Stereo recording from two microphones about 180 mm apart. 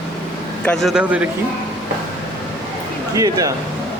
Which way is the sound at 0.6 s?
5° left (ahead or behind).